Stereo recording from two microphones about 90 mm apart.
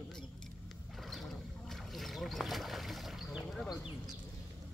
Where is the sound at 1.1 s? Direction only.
Centre (ahead or behind).